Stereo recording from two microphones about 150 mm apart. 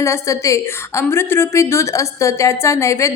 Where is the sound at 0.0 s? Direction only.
20° left (ahead or behind).